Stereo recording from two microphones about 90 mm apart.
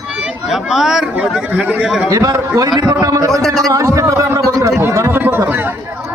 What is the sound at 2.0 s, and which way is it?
A man's voice, 45° right (ahead or behind).